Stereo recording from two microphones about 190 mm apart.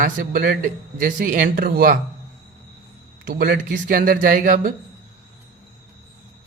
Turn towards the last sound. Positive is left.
turn(degrees=-45)  # may be behind; listen again after turning